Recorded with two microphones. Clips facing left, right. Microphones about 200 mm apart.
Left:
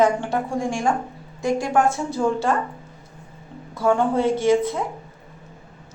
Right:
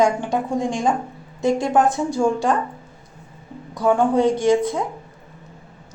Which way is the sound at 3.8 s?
15° right (ahead or behind).